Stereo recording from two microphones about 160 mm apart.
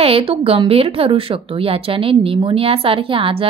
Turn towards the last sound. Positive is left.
turn(degrees=-35)  # may be behind; listen again after turning